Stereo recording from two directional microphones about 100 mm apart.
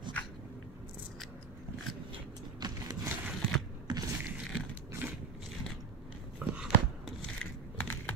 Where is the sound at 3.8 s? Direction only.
40° right (ahead or behind).